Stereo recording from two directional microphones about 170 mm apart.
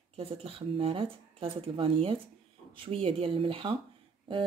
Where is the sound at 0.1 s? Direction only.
35° right (ahead or behind).